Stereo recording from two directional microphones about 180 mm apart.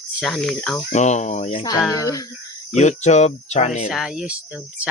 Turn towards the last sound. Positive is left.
turn(degrees=-5)  # may be behind; listen again after turning